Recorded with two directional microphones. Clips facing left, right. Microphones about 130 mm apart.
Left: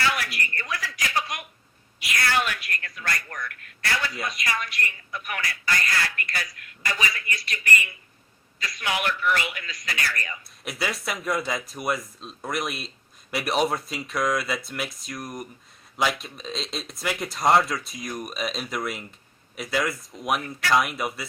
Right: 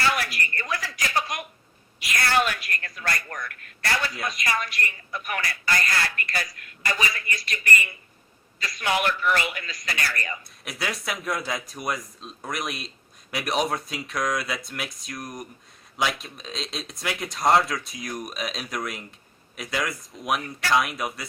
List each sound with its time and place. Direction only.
0.0 s a sound: 35° right (ahead or behind)
2.0 s a woman's voice: 40° right (ahead or behind)
10.6 s speech: centre (ahead or behind)